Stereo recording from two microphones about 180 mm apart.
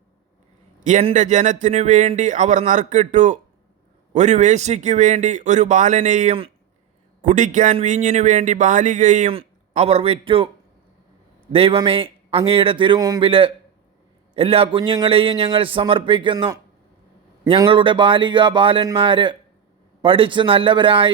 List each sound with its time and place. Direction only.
0.9 s a man's voice: 40° right (ahead or behind)
11.5 s a man's voice: 30° right (ahead or behind)